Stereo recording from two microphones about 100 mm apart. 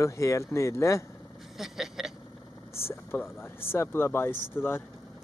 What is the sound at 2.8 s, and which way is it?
Vehicle, 25° left (ahead or behind).